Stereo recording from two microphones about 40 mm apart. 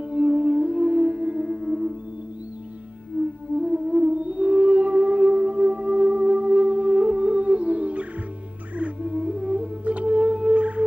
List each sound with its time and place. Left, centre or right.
0.0 s music: right
1.4 s music: centre
3.2 s music: right
4.1 s music: right